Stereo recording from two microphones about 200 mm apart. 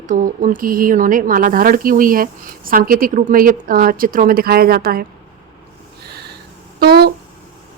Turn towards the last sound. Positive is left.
turn(degrees=-50)  # may be behind; listen again after turning